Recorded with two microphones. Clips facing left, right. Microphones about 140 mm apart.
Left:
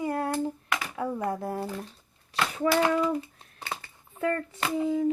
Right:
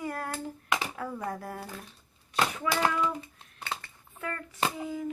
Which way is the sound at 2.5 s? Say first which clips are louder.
Left 7 dB; 40° left (ahead or behind).